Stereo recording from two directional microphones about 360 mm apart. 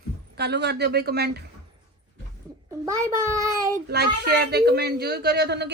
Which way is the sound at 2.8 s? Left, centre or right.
Centre.